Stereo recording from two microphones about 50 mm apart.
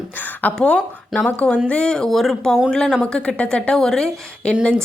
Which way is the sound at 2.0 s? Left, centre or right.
Centre.